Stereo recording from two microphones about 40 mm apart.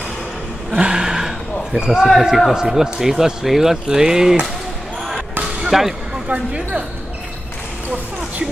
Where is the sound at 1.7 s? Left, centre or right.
Centre.